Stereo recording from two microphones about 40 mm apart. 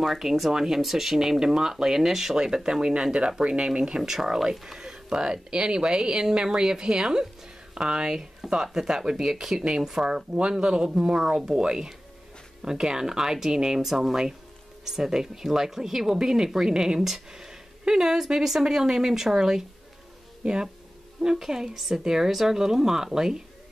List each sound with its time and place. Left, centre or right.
0.0 s speech: centre